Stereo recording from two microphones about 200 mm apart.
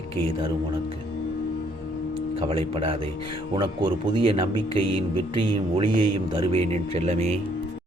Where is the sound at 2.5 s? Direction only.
25° right (ahead or behind).